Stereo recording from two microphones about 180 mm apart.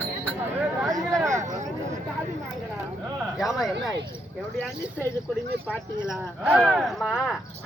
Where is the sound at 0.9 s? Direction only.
20° right (ahead or behind).